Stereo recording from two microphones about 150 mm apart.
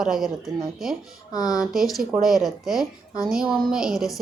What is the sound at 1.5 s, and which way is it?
A woman's voice, centre (ahead or behind).